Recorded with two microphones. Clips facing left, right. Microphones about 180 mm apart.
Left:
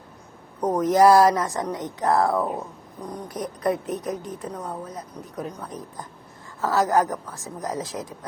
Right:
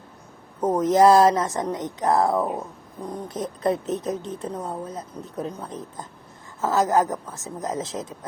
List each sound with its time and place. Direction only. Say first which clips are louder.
0.8 s speech: even; 20° right (ahead or behind)
2.4 s a sound: right 1 dB; centre (ahead or behind)
3.1 s speech: right 1 dB; 25° right (ahead or behind)